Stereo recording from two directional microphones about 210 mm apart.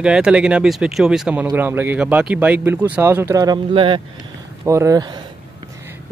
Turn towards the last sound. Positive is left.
turn(degrees=-20)  # may be behind; listen again after turning